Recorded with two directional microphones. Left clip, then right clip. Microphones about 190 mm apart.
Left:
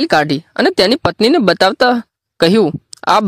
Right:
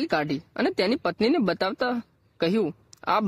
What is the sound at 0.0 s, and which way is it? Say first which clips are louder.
Speech: left 13 dB; 45° left (ahead or behind).